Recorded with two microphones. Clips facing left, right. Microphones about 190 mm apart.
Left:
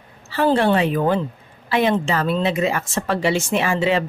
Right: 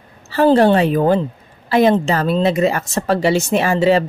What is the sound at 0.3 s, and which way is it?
Speech, 40° right (ahead or behind).